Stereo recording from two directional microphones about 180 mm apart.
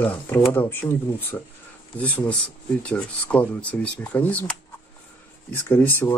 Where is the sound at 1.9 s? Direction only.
10° left (ahead or behind).